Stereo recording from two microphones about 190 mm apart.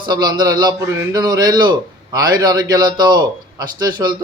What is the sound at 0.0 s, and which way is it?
A man's voice, 25° right (ahead or behind).